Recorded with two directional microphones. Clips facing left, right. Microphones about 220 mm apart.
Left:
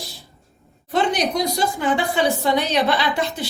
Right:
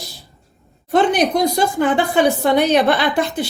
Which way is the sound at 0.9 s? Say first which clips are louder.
Right 5 dB; 55° right (ahead or behind).